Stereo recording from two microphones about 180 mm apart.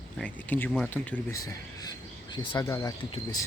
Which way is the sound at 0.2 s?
10° left (ahead or behind).